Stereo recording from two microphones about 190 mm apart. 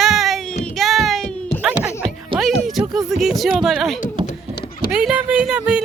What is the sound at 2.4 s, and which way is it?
Speech, centre (ahead or behind).